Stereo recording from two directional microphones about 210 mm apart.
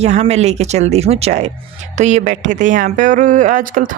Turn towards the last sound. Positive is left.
turn(degrees=-40)  # may be behind; listen again after turning